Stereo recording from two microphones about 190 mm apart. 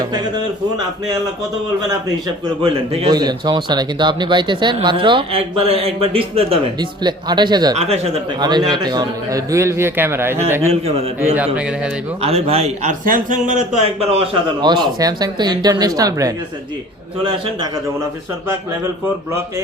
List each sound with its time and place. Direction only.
0.0 s speech: 20° right (ahead or behind)
2.2 s speech: 25° right (ahead or behind)
7.8 s a man's voice: 35° right (ahead or behind)
8.4 s a man's voice: 20° right (ahead or behind)
10.6 s a man's voice: 35° right (ahead or behind)
11.5 s speech: 5° right (ahead or behind)
12.2 s speech: 30° right (ahead or behind)